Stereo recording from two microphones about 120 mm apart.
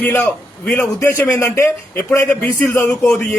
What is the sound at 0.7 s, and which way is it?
A man's voice, 25° left (ahead or behind).